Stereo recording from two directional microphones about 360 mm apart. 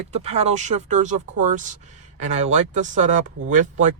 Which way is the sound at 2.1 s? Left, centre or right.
Centre.